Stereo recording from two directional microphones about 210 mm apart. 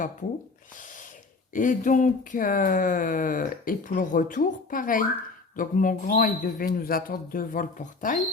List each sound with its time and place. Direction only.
1.5 s speech: 40° left (ahead or behind)